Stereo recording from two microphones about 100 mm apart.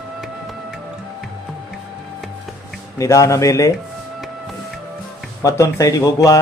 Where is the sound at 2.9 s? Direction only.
30° left (ahead or behind).